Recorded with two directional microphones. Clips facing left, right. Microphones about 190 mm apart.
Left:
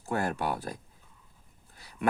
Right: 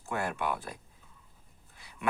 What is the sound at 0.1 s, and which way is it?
Speech, 40° left (ahead or behind).